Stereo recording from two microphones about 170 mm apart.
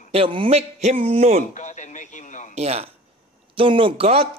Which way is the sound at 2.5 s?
40° right (ahead or behind).